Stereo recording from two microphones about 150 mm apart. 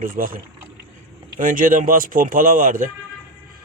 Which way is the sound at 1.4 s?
65° right (ahead or behind).